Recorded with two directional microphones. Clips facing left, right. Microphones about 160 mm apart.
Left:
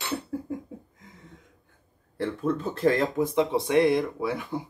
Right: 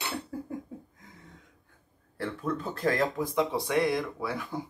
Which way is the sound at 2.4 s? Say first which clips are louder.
Left 5 dB; 20° left (ahead or behind).